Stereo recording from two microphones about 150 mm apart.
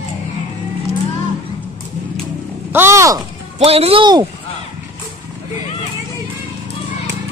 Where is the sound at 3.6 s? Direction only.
40° right (ahead or behind).